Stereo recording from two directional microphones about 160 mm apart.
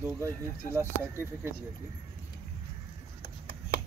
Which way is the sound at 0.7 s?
15° right (ahead or behind).